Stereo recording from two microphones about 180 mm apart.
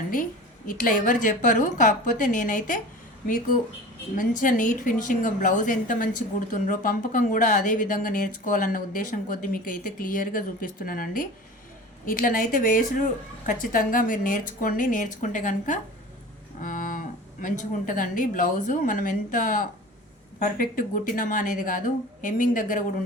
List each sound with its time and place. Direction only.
0.7 s a woman's voice: 50° left (ahead or behind)
4.2 s a woman's voice: 50° left (ahead or behind)
16.6 s moo: 45° left (ahead or behind)
17.4 s a woman's voice: 45° left (ahead or behind)